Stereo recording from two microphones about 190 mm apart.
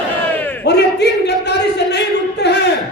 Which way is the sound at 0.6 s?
60° left (ahead or behind).